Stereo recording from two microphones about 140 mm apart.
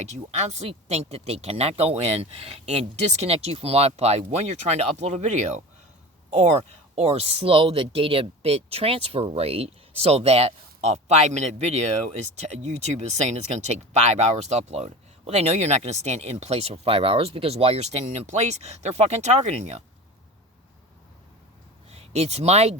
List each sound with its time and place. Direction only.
0.0 s speech: 55° right (ahead or behind)
21.8 s speech: 50° right (ahead or behind)